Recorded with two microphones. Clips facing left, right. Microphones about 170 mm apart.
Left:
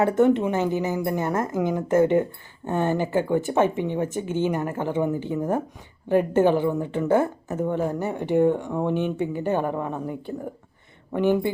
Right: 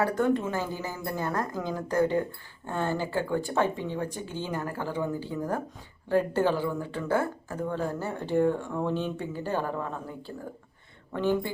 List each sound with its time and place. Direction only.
0.0 s speech: 25° left (ahead or behind)